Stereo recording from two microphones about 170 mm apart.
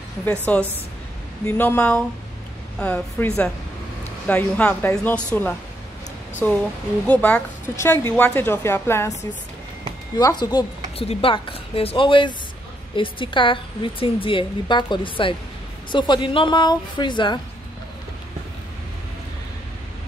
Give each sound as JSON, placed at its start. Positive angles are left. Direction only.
{"t": 0.2, "sound": "a woman's voice", "side_deg": 10}